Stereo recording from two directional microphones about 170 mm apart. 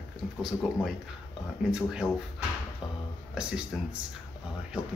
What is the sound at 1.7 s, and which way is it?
Speech, 5° right (ahead or behind).